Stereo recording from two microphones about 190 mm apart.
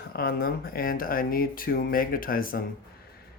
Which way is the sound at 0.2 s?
50° left (ahead or behind).